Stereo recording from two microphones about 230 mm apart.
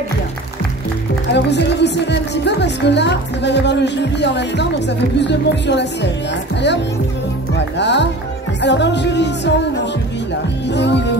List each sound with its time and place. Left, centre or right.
1.3 s speech: left
7.5 s speech: left
10.7 s music: left